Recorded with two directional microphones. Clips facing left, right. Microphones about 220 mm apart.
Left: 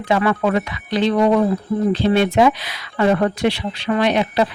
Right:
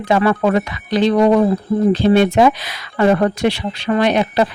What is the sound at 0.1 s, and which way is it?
Speech, 40° right (ahead or behind).